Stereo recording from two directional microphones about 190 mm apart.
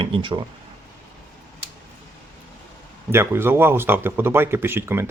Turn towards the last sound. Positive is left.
turn(degrees=-10)  # may be behind; listen again after turning